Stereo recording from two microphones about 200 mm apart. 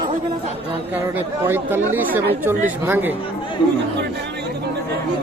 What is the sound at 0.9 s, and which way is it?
Speech, 10° right (ahead or behind).